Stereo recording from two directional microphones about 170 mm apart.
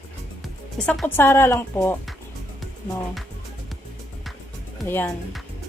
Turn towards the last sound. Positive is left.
turn(degrees=15)  # may be behind; listen again after turning